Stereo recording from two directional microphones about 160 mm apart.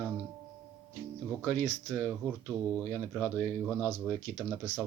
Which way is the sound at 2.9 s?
5° left (ahead or behind).